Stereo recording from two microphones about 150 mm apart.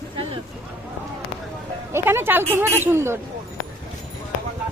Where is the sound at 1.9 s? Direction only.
15° right (ahead or behind).